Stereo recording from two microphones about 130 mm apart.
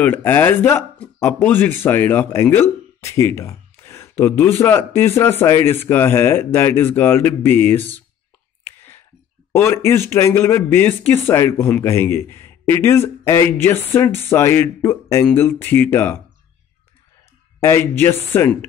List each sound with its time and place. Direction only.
0.0 s speech: 15° left (ahead or behind)
8.6 s whispering: 15° left (ahead or behind)
9.5 s speech: 20° left (ahead or behind)
17.6 s speech: 20° left (ahead or behind)